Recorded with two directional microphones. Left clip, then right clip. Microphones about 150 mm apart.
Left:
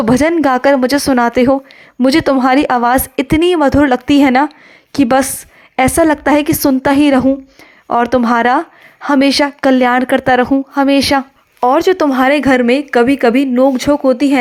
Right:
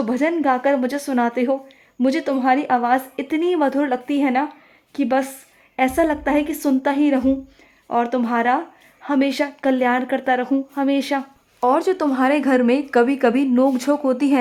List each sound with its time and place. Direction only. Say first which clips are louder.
0.0 s speech: left 8 dB; 40° left (ahead or behind); by 14.3 s 20° left (ahead or behind)